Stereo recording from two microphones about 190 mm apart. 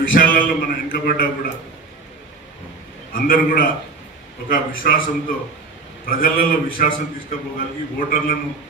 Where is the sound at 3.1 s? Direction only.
50° left (ahead or behind).